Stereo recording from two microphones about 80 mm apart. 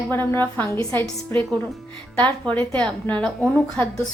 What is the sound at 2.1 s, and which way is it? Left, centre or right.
A woman's voice, centre.